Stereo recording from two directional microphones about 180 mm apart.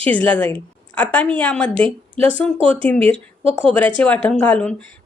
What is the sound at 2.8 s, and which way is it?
A woman's voice, 10° left (ahead or behind).